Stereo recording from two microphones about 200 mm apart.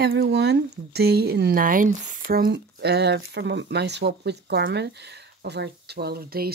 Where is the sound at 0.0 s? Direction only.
60° right (ahead or behind).